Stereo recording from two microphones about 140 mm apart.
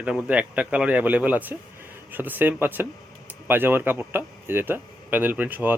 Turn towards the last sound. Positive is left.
turn(degrees=-10)  # may be behind; listen again after turning